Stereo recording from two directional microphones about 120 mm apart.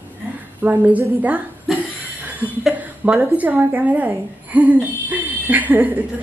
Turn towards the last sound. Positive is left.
turn(degrees=-15)  # may be behind; listen again after turning